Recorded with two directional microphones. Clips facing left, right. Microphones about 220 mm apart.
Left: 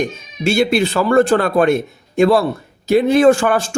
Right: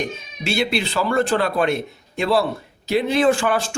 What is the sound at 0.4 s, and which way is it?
Speech, 45° left (ahead or behind).